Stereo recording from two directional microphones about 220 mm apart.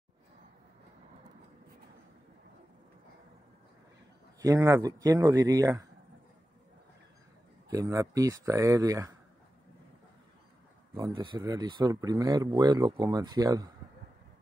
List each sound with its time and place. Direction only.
4.4 s speech: 15° right (ahead or behind)
7.7 s speech: 15° right (ahead or behind)
11.0 s speech: 15° right (ahead or behind)